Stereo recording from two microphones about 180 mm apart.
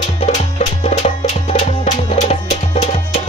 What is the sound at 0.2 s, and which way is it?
Music, 40° left (ahead or behind).